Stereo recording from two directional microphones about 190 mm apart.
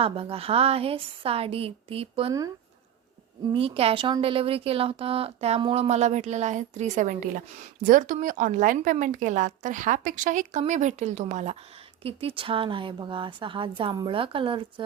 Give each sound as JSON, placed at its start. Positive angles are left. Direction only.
{"t": 0.0, "sound": "speech", "side_deg": -30}
{"t": 3.5, "sound": "a woman's voice", "side_deg": -30}